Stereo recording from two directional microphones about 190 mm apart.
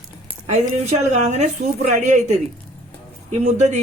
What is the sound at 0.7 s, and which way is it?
Speech, 35° right (ahead or behind).